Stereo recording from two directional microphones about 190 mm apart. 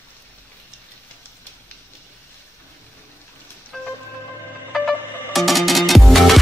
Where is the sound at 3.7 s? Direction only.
Centre (ahead or behind).